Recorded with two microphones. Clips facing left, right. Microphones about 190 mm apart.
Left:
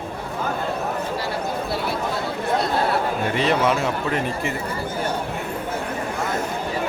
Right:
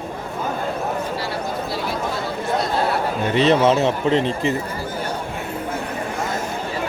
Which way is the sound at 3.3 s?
25° right (ahead or behind).